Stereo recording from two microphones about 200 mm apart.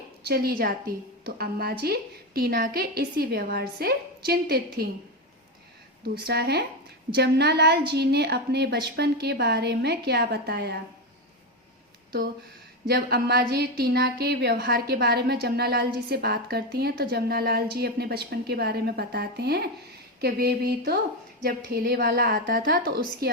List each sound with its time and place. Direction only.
0.2 s a woman's voice: 50° right (ahead or behind)
6.1 s a woman's voice: 50° right (ahead or behind)
12.9 s a woman's voice: 55° right (ahead or behind)